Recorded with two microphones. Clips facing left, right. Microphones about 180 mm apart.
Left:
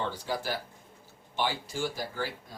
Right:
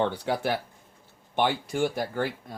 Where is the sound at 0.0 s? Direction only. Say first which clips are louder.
Right 7 dB; 65° right (ahead or behind).